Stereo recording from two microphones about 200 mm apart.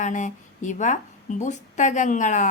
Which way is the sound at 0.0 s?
40° left (ahead or behind).